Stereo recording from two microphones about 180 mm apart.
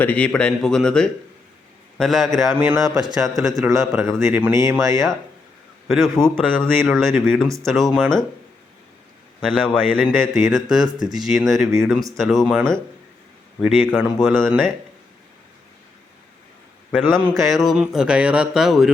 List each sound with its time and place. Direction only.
0.0 s a man's voice: 10° left (ahead or behind); by 4.9 s 15° right (ahead or behind)
5.9 s speech: centre (ahead or behind)
9.4 s speech: 5° left (ahead or behind)
17.2 s speech: 5° right (ahead or behind)